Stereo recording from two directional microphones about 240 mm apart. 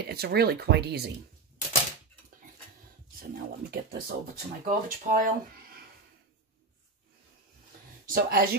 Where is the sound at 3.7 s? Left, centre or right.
Right.